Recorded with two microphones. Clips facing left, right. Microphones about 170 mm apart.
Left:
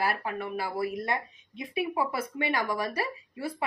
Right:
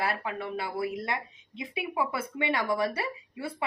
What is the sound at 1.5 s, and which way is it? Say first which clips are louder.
Speech: even; 25° right (ahead or behind).